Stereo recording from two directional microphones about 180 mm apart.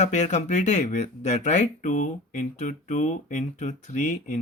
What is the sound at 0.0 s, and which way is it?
Speech, 40° left (ahead or behind).